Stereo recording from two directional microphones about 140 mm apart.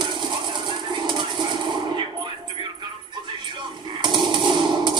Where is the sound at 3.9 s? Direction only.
35° right (ahead or behind).